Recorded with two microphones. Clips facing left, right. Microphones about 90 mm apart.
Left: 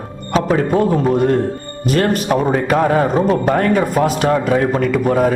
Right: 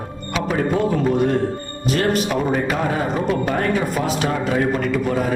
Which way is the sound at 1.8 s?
45° left (ahead or behind).